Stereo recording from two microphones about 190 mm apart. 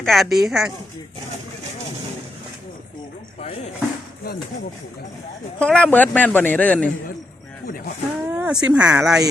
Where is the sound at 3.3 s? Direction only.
35° left (ahead or behind).